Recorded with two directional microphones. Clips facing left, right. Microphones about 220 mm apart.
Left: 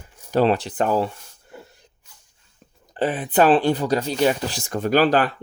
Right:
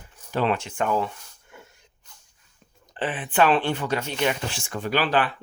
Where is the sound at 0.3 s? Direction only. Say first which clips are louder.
Left 6 dB; 40° left (ahead or behind).